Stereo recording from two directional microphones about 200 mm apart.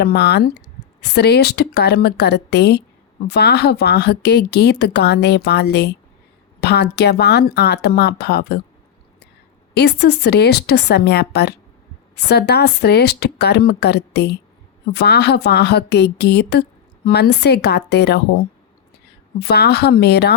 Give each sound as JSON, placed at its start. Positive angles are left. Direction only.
{"t": 0.0, "sound": "a woman's voice", "side_deg": 55}
{"t": 9.7, "sound": "a woman's voice", "side_deg": 55}
{"t": 19.4, "sound": "a woman's voice", "side_deg": 55}